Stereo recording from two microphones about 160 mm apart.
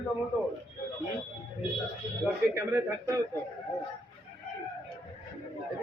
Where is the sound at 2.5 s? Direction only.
15° right (ahead or behind).